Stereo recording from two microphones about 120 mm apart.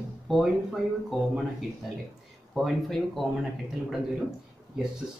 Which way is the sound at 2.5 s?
Centre (ahead or behind).